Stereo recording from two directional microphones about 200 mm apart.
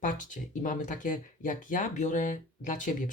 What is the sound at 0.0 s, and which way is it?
Speech, 40° left (ahead or behind).